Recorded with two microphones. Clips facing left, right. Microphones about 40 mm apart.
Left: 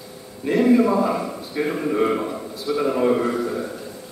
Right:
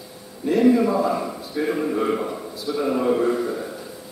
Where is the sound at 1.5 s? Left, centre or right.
Left.